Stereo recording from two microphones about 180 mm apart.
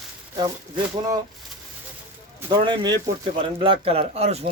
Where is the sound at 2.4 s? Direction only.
25° right (ahead or behind).